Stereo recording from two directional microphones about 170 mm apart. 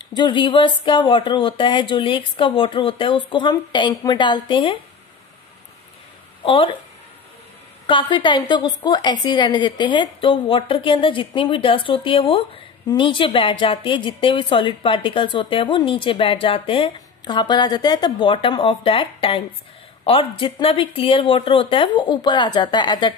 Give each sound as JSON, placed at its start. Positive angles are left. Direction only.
{"t": 0.0, "sound": "a woman's voice", "side_deg": 25}
{"t": 6.4, "sound": "speech", "side_deg": 30}
{"t": 7.8, "sound": "a woman's voice", "side_deg": 30}